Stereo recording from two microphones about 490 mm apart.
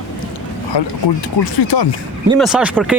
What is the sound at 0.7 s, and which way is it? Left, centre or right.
Speech, left.